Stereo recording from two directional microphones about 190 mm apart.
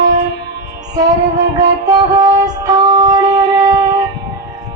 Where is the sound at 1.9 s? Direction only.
20° right (ahead or behind).